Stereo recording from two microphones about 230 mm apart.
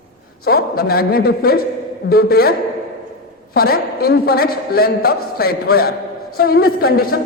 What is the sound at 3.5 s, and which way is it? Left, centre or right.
A man's voice, left.